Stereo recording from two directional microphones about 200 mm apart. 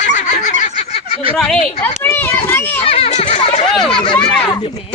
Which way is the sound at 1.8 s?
10° left (ahead or behind).